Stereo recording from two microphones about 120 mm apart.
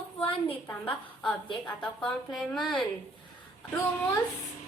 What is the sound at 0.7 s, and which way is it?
A woman's voice, 10° left (ahead or behind).